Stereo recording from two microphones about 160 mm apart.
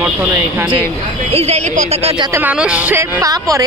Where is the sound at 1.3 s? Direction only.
40° right (ahead or behind).